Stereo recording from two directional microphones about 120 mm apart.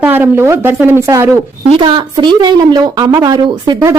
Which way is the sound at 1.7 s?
40° right (ahead or behind).